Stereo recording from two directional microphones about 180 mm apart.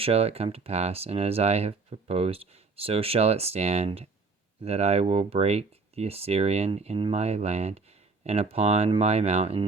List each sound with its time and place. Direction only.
0.0 s speech: 35° right (ahead or behind)